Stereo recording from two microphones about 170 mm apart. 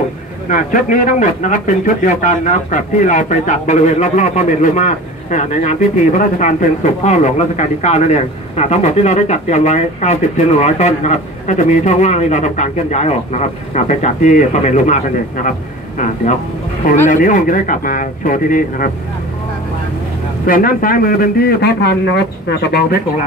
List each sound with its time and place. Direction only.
0.5 s a man's voice: 50° left (ahead or behind)
17.1 s a man's voice: 50° left (ahead or behind)
20.4 s a man's voice: 55° left (ahead or behind)